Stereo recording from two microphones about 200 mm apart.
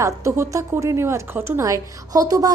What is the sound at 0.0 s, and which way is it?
Speech, 15° right (ahead or behind).